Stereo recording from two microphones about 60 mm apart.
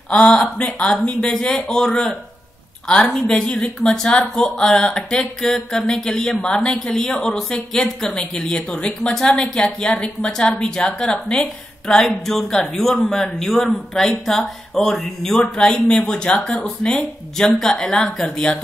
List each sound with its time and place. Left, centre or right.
0.1 s speech: centre